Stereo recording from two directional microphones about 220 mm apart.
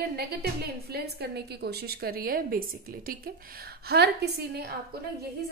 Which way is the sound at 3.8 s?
50° right (ahead or behind).